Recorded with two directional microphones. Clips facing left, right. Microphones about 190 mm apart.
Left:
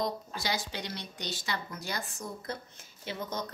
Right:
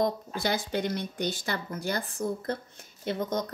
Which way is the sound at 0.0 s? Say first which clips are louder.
Right 6 dB; 55° right (ahead or behind).